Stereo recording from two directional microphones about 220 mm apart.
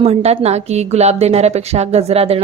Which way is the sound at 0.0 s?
30° right (ahead or behind).